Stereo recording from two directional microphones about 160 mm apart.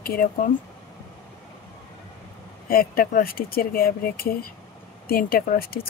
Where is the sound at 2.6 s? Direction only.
65° left (ahead or behind).